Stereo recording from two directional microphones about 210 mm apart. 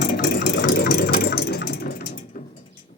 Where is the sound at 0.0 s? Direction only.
45° left (ahead or behind).